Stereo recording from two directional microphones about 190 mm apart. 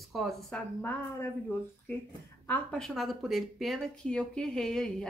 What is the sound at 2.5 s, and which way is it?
Speech, 5° left (ahead or behind).